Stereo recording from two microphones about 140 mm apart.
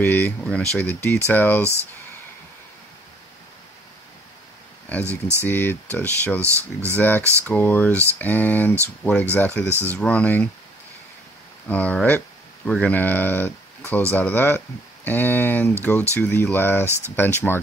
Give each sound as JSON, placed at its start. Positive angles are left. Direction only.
{"t": 0.0, "sound": "speech", "side_deg": 15}
{"t": 1.6, "sound": "speech", "side_deg": -20}
{"t": 5.4, "sound": "speech", "side_deg": 15}
{"t": 6.4, "sound": "speech", "side_deg": -20}
{"t": 7.0, "sound": "speech", "side_deg": 15}
{"t": 7.9, "sound": "speech", "side_deg": -20}
{"t": 8.2, "sound": "speech", "side_deg": 10}
{"t": 11.7, "sound": "speech", "side_deg": 10}